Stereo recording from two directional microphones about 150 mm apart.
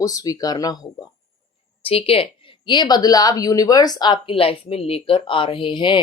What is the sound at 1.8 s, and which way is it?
A woman's voice, 40° left (ahead or behind).